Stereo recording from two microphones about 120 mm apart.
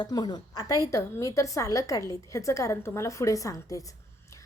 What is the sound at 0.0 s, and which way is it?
A woman's voice, 35° left (ahead or behind).